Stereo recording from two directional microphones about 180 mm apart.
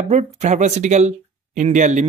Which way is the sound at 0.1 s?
40° right (ahead or behind).